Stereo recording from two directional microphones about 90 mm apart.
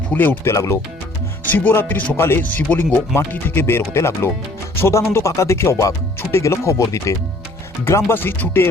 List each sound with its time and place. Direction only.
0.1 s speech: 20° left (ahead or behind)
0.5 s speech: 35° left (ahead or behind)
1.5 s speech: 20° left (ahead or behind)